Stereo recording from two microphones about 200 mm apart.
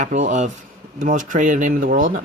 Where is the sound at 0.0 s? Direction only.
40° right (ahead or behind).